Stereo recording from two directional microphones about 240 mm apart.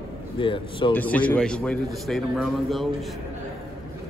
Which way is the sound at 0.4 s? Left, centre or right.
Left.